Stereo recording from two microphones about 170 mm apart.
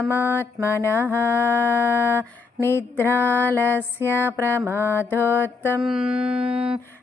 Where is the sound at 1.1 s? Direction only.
15° left (ahead or behind).